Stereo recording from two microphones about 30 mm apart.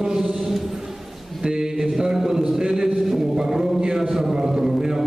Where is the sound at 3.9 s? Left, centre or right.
Centre.